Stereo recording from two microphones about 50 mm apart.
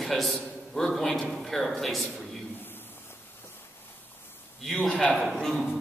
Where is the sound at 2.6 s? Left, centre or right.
Left.